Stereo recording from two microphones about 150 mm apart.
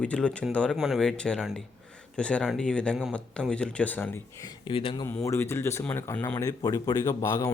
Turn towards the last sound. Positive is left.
turn(degrees=20)  # may be behind; listen again after turning